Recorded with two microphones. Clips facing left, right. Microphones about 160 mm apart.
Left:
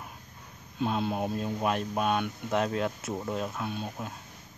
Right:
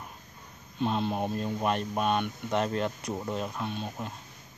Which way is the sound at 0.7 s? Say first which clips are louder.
Even; 5° left (ahead or behind).